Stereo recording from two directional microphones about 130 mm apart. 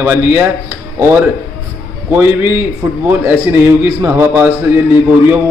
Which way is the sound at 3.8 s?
15° right (ahead or behind).